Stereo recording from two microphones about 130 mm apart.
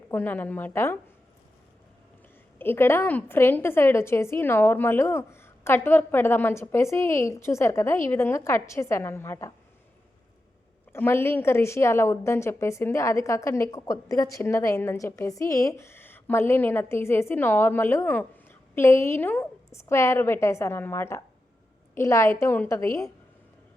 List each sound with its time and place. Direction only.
0.1 s a woman's voice: 15° left (ahead or behind)
2.6 s a woman's voice: 15° left (ahead or behind)
10.9 s a woman's voice: 15° left (ahead or behind)